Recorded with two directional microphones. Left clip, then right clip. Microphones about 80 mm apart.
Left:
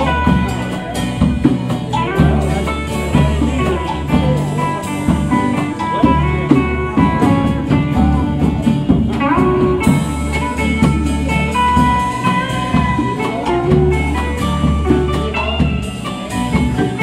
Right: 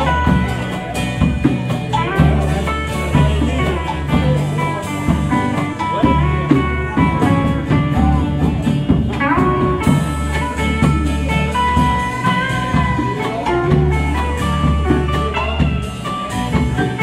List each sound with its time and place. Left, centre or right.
0.0 s music: right
3.2 s music: right
9.2 s music: right
11.3 s music: right